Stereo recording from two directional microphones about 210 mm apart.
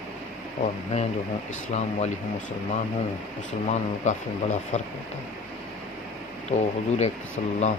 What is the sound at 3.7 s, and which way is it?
Speech, 35° left (ahead or behind).